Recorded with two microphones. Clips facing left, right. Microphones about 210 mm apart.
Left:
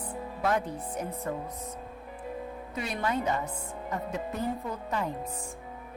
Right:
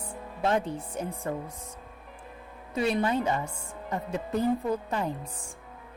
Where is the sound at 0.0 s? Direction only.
25° right (ahead or behind).